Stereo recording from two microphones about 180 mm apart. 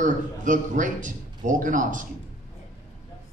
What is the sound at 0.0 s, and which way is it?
A man's voice, 45° right (ahead or behind).